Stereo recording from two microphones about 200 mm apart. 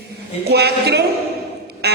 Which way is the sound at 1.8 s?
55° right (ahead or behind).